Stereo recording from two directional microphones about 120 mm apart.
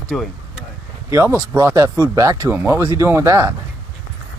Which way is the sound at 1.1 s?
20° right (ahead or behind).